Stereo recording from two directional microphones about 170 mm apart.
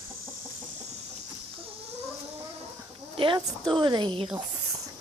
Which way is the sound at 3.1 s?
30° right (ahead or behind).